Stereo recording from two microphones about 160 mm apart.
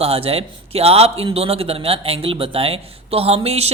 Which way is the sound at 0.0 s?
40° right (ahead or behind).